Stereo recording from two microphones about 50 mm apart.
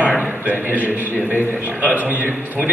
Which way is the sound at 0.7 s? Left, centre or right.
Right.